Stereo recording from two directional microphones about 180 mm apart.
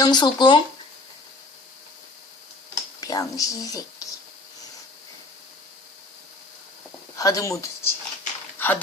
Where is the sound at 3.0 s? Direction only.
20° left (ahead or behind).